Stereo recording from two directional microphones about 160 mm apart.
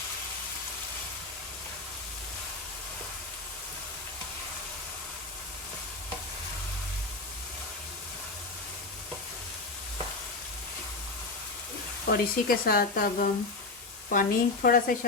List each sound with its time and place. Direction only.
12.0 s speech: 65° left (ahead or behind)